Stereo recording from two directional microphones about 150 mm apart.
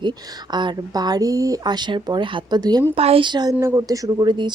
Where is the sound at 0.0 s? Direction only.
30° right (ahead or behind).